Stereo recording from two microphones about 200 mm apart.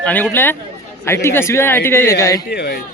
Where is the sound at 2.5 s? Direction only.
55° left (ahead or behind).